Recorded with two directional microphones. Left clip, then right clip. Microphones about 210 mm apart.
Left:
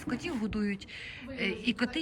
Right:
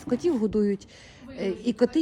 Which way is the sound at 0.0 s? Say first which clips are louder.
Right 10 dB; 20° right (ahead or behind).